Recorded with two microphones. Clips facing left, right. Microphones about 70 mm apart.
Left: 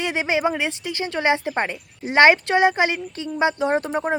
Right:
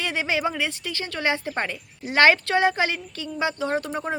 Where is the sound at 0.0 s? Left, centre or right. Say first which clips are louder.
Left 4 dB; left.